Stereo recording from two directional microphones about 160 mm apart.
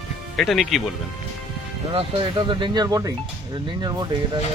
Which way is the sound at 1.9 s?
35° right (ahead or behind).